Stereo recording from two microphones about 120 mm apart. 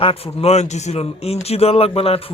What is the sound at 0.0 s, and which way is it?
Speech, 55° left (ahead or behind).